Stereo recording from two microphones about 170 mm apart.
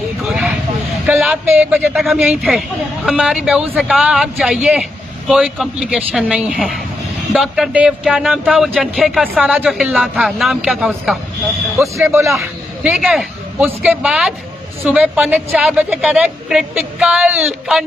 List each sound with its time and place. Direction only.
1.0 s a man's voice: 5° right (ahead or behind)
1.7 s a woman's voice: centre (ahead or behind)
11.8 s a man's voice: 15° right (ahead or behind)
12.4 s a woman's voice: 5° right (ahead or behind)